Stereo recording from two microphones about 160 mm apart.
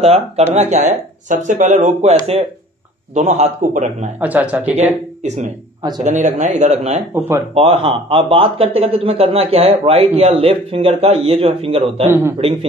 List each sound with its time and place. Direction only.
0.0 s speech: 40° right (ahead or behind)
4.2 s speech: 10° right (ahead or behind)
4.7 s speech: 45° right (ahead or behind)
5.8 s speech: 25° right (ahead or behind)
6.0 s speech: 50° right (ahead or behind)
7.2 s speech: 20° right (ahead or behind)
7.5 s speech: 40° right (ahead or behind)
12.1 s speech: 15° right (ahead or behind)